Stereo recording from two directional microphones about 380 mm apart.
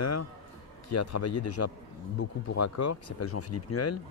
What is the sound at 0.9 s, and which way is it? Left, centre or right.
Speech, left.